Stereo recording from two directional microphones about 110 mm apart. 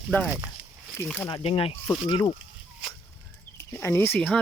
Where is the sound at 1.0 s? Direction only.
30° left (ahead or behind).